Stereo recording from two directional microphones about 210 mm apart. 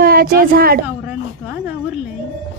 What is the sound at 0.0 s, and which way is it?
Speech, 45° right (ahead or behind).